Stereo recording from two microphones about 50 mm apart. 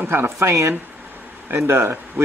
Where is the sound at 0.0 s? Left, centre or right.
Right.